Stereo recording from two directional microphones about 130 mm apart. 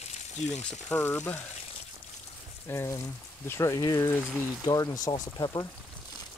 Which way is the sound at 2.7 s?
20° left (ahead or behind).